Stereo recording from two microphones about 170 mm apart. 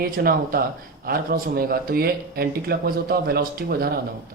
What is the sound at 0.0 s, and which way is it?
Speech, 60° right (ahead or behind).